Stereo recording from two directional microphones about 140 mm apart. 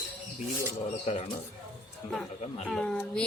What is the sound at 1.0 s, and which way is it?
Speech, 50° left (ahead or behind).